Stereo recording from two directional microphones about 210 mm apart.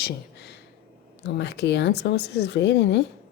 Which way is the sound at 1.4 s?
55° left (ahead or behind).